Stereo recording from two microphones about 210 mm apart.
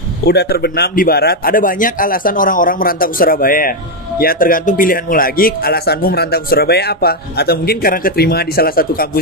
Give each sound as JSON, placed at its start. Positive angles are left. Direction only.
{"t": 0.3, "sound": "speech", "side_deg": 50}